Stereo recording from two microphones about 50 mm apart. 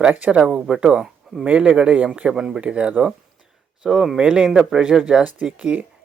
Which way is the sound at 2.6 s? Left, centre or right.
Right.